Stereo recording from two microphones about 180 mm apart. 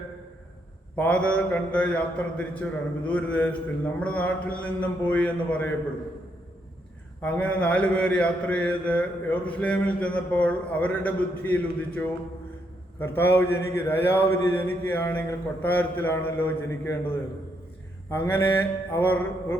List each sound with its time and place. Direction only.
0.9 s mantra: 5° left (ahead or behind)
7.2 s mantra: 10° left (ahead or behind)
13.0 s mantra: 10° left (ahead or behind)
18.1 s mantra: 10° left (ahead or behind)